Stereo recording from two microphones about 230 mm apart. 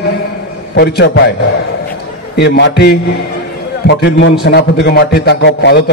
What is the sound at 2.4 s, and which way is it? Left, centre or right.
A man's voice, left.